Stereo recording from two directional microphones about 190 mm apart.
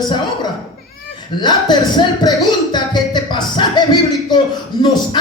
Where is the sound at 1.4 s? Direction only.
25° left (ahead or behind).